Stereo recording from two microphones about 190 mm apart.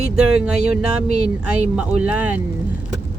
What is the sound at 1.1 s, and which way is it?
Speech, 35° right (ahead or behind).